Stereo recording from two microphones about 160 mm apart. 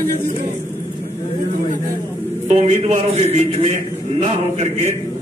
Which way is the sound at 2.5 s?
45° right (ahead or behind).